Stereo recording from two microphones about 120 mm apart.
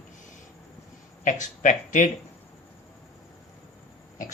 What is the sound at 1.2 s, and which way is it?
Speech, 90° left.